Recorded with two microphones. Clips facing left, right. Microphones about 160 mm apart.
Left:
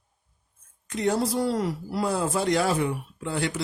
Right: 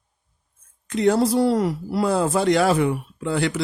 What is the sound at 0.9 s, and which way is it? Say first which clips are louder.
Speech: right 6 dB; 80° right.